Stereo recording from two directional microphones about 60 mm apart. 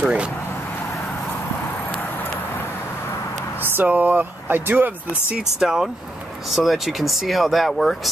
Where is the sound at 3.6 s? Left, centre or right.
Right.